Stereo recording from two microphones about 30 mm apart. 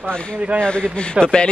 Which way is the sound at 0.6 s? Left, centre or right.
Left.